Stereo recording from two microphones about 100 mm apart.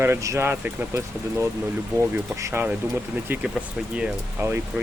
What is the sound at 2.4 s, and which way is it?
Speech, 25° right (ahead or behind).